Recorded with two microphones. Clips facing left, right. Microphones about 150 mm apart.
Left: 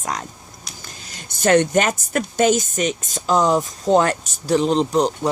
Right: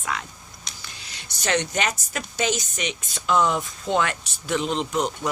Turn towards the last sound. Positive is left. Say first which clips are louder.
# left 7 dB
turn(degrees=35)  # may be behind; listen again after turning